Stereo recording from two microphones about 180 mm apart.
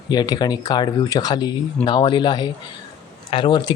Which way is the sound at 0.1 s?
20° left (ahead or behind).